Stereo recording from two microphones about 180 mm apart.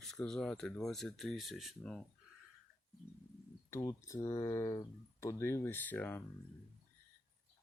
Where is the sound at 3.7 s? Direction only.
15° left (ahead or behind).